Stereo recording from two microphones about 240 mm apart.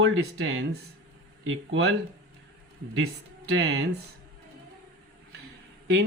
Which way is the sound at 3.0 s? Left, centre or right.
Right.